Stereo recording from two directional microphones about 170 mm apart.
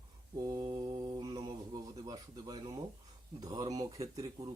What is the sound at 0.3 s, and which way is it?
Mantra, 20° right (ahead or behind).